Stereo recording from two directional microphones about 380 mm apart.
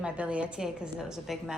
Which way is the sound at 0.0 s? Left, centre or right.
Centre.